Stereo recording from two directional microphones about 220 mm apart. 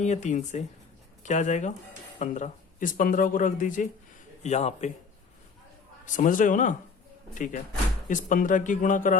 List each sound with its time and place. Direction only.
0.0 s speech: 30° left (ahead or behind)
6.1 s speech: 35° left (ahead or behind)